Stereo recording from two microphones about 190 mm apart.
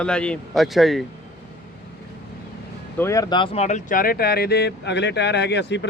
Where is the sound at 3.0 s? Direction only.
15° left (ahead or behind).